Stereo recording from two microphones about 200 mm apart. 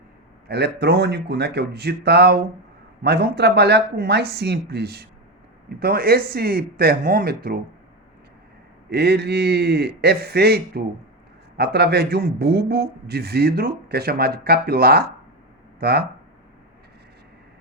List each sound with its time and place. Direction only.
0.4 s a man's voice: 55° right (ahead or behind)
8.9 s a man's voice: 55° right (ahead or behind)